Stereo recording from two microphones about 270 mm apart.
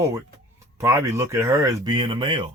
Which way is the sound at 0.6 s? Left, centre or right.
Centre.